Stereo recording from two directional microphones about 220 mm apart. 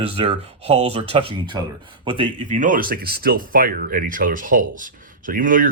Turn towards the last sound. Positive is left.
turn(degrees=-40)  # may be behind; listen again after turning